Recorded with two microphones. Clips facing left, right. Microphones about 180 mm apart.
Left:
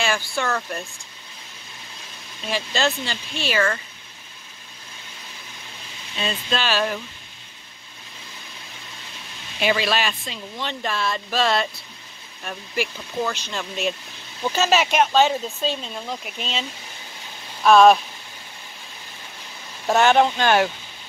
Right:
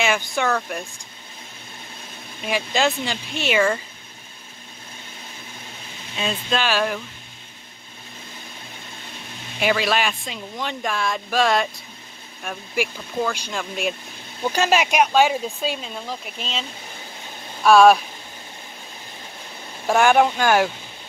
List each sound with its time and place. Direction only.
0.0 s speech: 20° right (ahead or behind)
0.5 s speech: centre (ahead or behind)
2.4 s speech: 15° right (ahead or behind)
6.1 s speech: 10° right (ahead or behind)
9.6 s speech: 5° right (ahead or behind)
17.6 s speech: 5° right (ahead or behind)
19.9 s speech: 10° right (ahead or behind)